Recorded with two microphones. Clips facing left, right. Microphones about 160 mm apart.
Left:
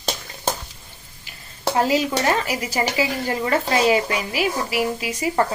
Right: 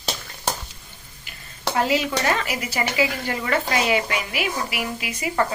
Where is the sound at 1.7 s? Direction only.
35° left (ahead or behind).